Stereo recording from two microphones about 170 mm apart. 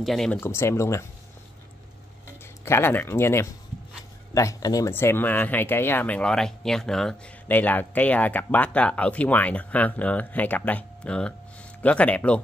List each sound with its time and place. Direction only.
0.0 s speech: centre (ahead or behind)
0.4 s speech: 15° left (ahead or behind)
2.6 s speech: 15° left (ahead or behind)